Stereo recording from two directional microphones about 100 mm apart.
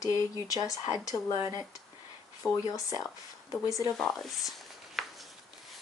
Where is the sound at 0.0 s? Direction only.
35° left (ahead or behind).